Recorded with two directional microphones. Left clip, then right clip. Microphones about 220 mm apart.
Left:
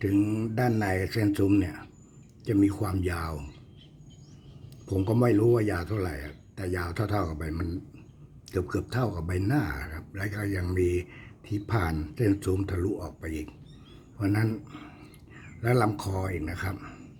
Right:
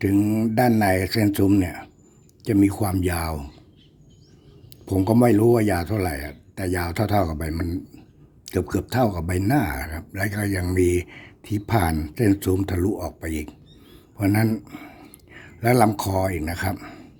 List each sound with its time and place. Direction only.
0.0 s speech: 30° right (ahead or behind)
4.9 s speech: 30° right (ahead or behind)